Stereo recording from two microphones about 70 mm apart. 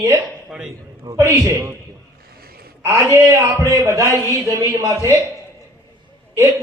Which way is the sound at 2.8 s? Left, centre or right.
Right.